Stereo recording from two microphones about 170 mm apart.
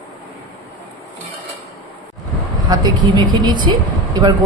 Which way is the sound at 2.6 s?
25° right (ahead or behind).